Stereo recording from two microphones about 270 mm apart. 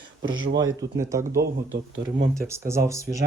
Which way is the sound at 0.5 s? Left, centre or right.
Centre.